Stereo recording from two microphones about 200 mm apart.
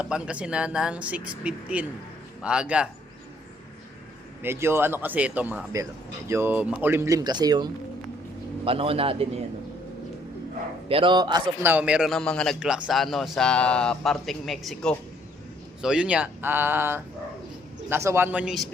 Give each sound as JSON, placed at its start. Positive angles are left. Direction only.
{"t": 0.0, "sound": "a man's voice", "side_deg": -5}
{"t": 4.4, "sound": "a man's voice", "side_deg": -10}
{"t": 10.8, "sound": "a man's voice", "side_deg": -25}
{"t": 11.7, "sound": "a man's voice", "side_deg": -5}